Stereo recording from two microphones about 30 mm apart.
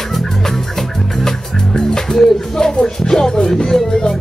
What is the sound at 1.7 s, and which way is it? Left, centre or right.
Music, left.